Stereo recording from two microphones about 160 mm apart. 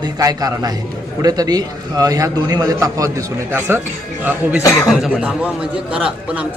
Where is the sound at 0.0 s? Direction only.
25° right (ahead or behind).